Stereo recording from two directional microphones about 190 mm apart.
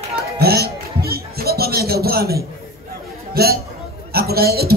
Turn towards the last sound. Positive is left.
turn(degrees=-55)  # may be behind; listen again after turning